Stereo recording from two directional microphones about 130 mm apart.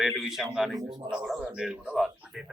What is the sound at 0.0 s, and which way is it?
A man's voice, 5° right (ahead or behind).